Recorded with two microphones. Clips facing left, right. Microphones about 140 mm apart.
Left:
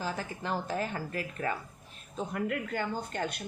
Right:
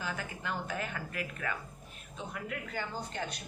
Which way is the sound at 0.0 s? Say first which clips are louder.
Left 3 dB; 35° left (ahead or behind).